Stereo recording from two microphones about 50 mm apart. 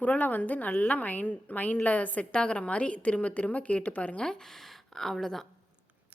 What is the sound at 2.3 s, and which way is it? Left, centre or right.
A woman's voice, centre.